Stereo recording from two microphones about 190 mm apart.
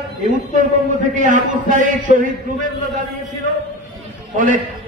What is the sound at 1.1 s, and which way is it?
A man's voice, 40° right (ahead or behind).